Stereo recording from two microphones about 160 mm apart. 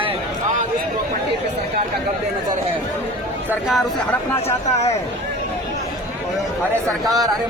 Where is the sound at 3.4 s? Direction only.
5° right (ahead or behind).